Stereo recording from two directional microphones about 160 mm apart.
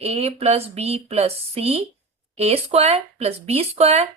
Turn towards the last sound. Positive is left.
turn(degrees=-40)  # may be behind; listen again after turning